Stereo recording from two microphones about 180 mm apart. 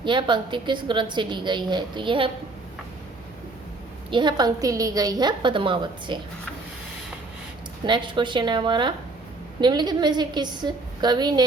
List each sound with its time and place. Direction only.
0.0 s a woman's voice: 25° right (ahead or behind)
4.1 s a woman's voice: 25° right (ahead or behind)
7.9 s a woman's voice: 25° right (ahead or behind)